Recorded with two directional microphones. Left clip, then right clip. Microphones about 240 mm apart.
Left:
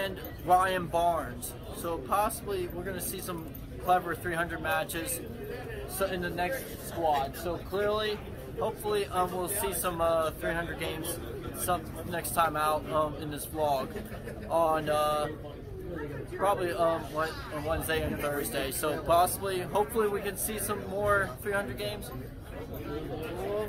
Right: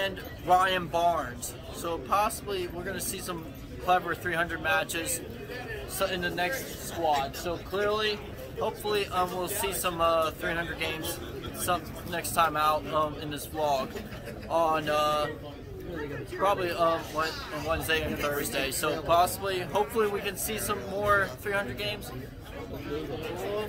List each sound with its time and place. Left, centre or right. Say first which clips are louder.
0.0 s speech: right 3 dB; centre
7.1 s speech: right 1 dB; centre
16.4 s speech: right 2 dB; centre